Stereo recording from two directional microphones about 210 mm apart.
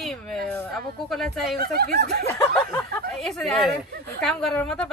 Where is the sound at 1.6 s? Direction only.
45° right (ahead or behind).